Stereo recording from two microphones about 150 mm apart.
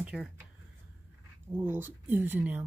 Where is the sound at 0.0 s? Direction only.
5° right (ahead or behind).